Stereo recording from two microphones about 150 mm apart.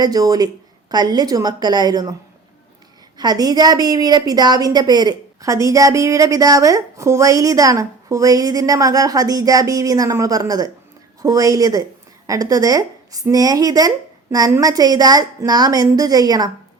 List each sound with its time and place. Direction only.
0.0 s a woman's voice: 25° right (ahead or behind)
3.2 s a woman's voice: 25° right (ahead or behind)